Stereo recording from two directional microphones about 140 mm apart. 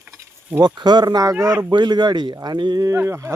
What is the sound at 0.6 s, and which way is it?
Speech, 30° right (ahead or behind).